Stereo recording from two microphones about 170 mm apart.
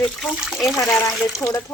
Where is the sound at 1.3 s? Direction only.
20° left (ahead or behind).